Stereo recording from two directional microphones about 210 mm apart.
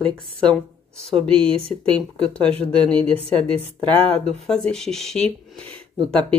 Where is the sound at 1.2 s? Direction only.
25° right (ahead or behind).